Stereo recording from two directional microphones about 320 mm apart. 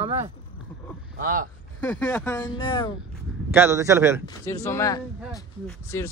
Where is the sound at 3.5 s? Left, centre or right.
Centre.